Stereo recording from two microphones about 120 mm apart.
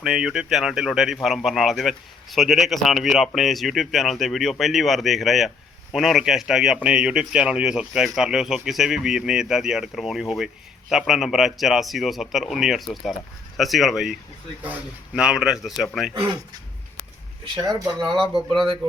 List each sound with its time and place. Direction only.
0.0 s speech: 5° right (ahead or behind)
17.4 s speech: 35° right (ahead or behind)
18.2 s speech: centre (ahead or behind)